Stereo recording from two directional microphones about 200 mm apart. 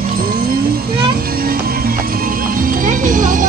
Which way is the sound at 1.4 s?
45° right (ahead or behind).